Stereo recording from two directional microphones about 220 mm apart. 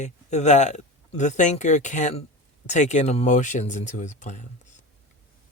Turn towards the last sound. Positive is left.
turn(degrees=35)  # may be behind; listen again after turning